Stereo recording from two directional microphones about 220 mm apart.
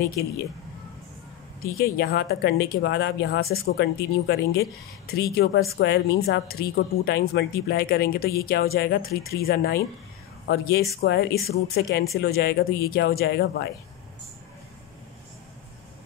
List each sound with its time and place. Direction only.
0.2 s speech: 45° left (ahead or behind)
1.6 s speech: 45° left (ahead or behind)